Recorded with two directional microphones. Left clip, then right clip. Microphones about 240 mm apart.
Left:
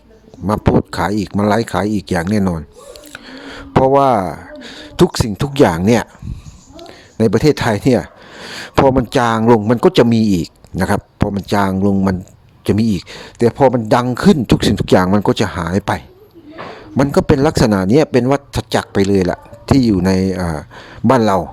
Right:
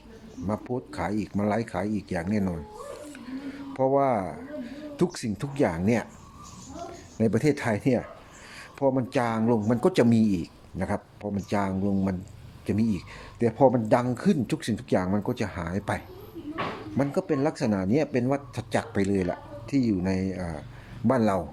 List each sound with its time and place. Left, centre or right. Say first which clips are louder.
0.4 s speech: left 16 dB; left
7.2 s speech: left 12 dB; left